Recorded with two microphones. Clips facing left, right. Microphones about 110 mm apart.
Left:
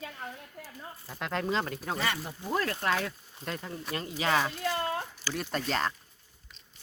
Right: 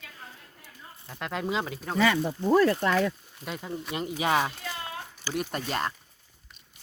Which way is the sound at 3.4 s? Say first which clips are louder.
Right 2 dB; 10° right (ahead or behind).